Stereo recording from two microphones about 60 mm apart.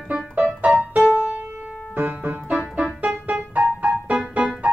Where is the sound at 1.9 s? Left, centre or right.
Right.